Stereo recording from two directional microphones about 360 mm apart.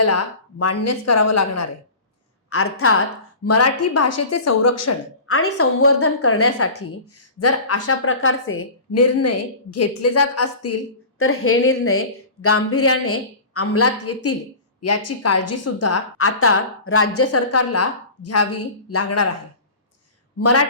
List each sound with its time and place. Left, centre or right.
0.6 s a woman's voice: left
20.4 s a woman's voice: left